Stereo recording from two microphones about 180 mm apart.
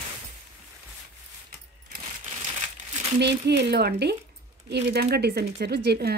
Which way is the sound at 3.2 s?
70° right (ahead or behind).